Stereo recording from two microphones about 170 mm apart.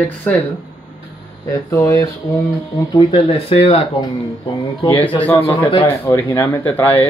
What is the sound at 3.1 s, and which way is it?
Speech, 35° left (ahead or behind).